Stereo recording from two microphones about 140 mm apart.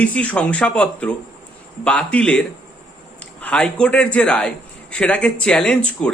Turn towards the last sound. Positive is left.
turn(degrees=5)  # may be behind; listen again after turning